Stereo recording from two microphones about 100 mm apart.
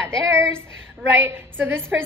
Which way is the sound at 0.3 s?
25° right (ahead or behind).